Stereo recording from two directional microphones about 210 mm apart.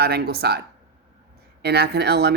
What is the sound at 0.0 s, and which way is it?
Speech, 50° right (ahead or behind).